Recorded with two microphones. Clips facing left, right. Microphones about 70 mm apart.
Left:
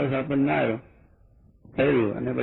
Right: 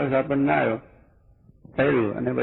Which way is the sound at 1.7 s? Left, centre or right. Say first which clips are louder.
Right 1 dB; right.